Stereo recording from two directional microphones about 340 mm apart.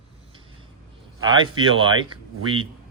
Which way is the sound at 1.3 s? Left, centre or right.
Centre.